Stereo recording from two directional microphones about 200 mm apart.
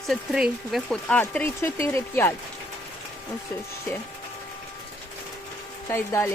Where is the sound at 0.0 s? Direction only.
Centre (ahead or behind).